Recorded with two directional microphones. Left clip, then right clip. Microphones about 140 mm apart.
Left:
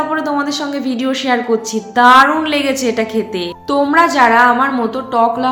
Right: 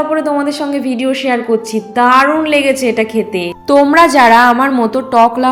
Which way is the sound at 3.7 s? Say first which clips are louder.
Right 5 dB; 45° right (ahead or behind).